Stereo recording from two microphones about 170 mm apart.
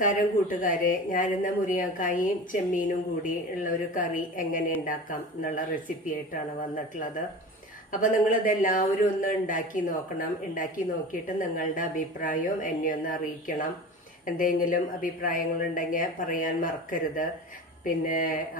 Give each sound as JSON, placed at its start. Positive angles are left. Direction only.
{"t": 0.0, "sound": "speech", "side_deg": 50}
{"t": 8.0, "sound": "speech", "side_deg": 50}